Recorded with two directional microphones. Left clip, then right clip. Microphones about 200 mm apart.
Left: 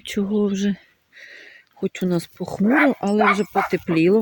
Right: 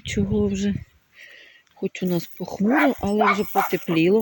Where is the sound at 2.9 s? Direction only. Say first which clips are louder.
Left 2 dB; 15° left (ahead or behind).